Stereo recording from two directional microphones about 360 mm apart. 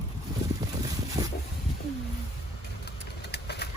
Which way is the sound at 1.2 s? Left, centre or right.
Centre.